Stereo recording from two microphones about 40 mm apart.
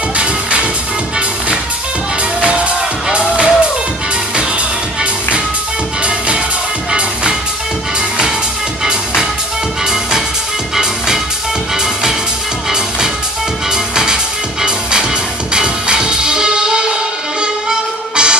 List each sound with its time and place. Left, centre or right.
0.2 s music: right
2.4 s music: right
6.0 s music: right
8.8 s music: right
13.7 s music: centre